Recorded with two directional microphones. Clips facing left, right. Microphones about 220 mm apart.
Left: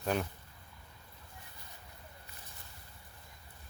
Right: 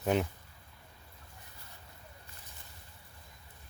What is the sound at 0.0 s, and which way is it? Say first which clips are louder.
Speech: right 4 dB; 20° right (ahead or behind).